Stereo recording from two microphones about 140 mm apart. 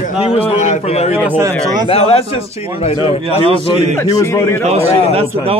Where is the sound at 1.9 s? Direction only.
45° left (ahead or behind).